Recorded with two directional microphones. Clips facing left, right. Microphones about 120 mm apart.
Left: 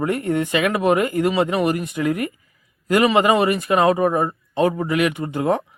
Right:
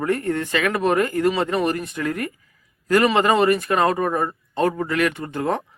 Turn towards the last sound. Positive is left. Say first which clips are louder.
# left 3 dB
turn(degrees=10)  # may be behind; listen again after turning